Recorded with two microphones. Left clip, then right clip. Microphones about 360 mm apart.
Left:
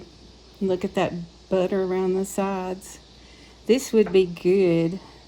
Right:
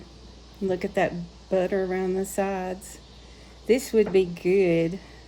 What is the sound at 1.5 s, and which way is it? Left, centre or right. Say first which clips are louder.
Speech: left 2 dB; centre.